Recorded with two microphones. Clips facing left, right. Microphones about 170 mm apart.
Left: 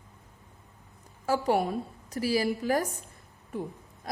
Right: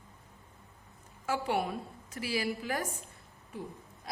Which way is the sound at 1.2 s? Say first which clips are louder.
Left 6 dB; 40° left (ahead or behind).